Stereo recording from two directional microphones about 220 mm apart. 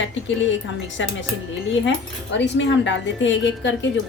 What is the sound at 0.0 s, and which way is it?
A woman's voice, 55° left (ahead or behind).